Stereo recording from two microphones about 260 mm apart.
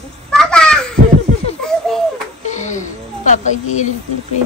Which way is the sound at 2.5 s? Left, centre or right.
Left.